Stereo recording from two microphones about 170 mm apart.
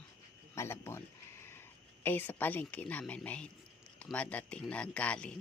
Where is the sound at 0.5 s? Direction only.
15° left (ahead or behind).